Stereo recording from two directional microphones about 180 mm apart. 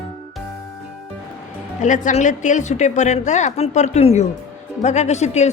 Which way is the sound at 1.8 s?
45° left (ahead or behind).